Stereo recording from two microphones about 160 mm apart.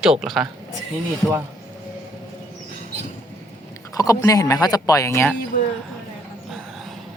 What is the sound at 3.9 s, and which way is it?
Speech, 20° left (ahead or behind).